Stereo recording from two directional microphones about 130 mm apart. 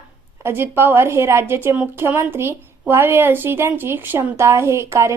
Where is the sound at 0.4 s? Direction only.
15° right (ahead or behind).